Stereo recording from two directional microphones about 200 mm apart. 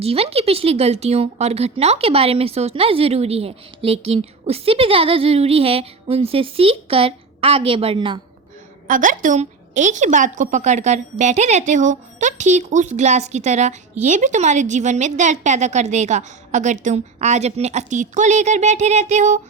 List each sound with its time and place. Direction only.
0.0 s a woman's voice: 30° right (ahead or behind)
8.9 s a woman's voice: 40° right (ahead or behind)